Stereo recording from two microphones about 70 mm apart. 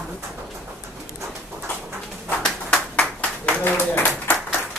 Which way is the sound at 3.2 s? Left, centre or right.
Left.